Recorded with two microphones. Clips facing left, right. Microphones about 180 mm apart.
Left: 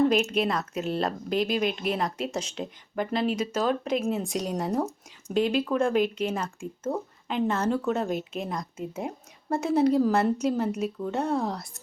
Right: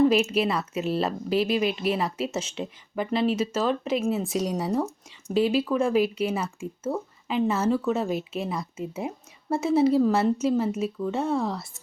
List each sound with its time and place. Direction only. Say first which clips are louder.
0.0 s speech: right 2 dB; 5° right (ahead or behind)